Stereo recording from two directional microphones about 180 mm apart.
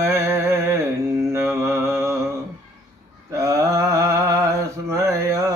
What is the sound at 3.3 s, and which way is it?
Mantra, 15° right (ahead or behind).